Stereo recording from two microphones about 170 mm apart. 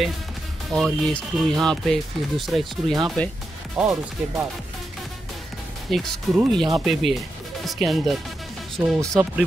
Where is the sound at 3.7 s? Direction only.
5° right (ahead or behind).